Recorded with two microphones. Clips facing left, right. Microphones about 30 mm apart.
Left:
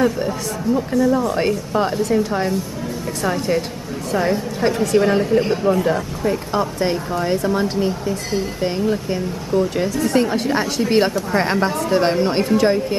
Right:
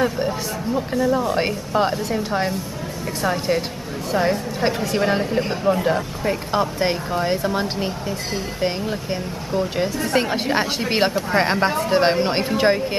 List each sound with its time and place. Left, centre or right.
1.0 s a woman's voice: centre
3.2 s a woman's voice: centre